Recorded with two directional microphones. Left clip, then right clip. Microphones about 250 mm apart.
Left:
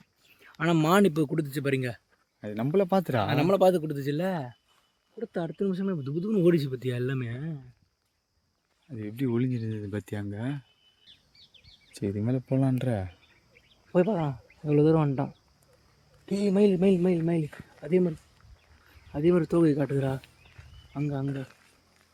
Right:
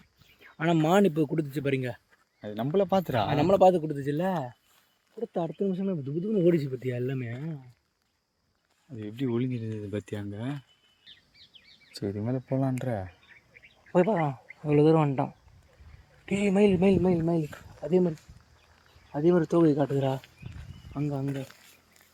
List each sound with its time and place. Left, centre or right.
0.4 s speech: centre
9.0 s speech: left
11.0 s bird: centre
12.2 s speech: left
13.5 s speech: centre
19.1 s speech: centre